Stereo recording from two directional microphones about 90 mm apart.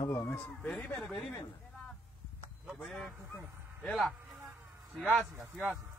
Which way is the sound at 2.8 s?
10° left (ahead or behind).